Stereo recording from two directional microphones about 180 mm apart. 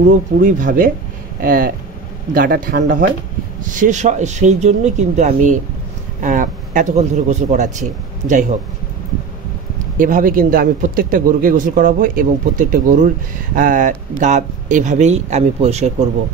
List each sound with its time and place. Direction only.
0.0 s speech: 45° right (ahead or behind)
3.7 s speech: 45° right (ahead or behind)
9.9 s speech: 50° right (ahead or behind)